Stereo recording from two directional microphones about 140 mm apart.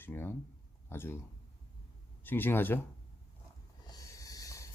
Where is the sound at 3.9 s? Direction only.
25° left (ahead or behind).